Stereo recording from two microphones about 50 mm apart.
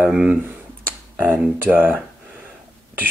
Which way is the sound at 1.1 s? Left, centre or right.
Right.